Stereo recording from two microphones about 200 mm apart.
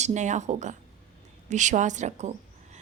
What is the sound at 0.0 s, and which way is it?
A woman's voice, 35° right (ahead or behind).